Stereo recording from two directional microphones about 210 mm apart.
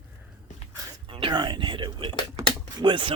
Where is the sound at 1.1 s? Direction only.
25° right (ahead or behind).